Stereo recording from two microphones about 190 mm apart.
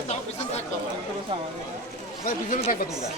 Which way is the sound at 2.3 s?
45° left (ahead or behind).